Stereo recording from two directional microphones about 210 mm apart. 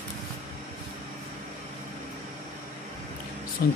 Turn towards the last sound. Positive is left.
turn(degrees=45)  # may be behind; listen again after turning